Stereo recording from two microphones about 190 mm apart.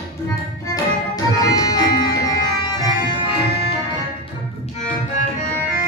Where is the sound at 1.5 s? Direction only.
20° left (ahead or behind).